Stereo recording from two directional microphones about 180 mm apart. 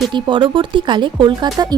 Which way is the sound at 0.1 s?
25° right (ahead or behind).